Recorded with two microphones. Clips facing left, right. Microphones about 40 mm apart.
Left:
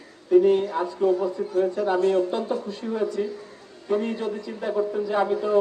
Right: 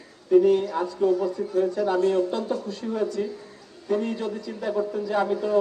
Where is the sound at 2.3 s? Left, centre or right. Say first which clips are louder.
Left 1 dB; left.